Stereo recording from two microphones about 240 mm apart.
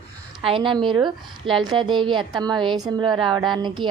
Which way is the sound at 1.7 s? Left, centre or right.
Centre.